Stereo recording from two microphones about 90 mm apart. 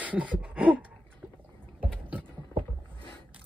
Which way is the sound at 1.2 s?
15° right (ahead or behind).